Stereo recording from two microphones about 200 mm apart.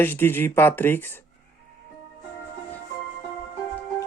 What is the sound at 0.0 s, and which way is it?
Speech, 10° left (ahead or behind).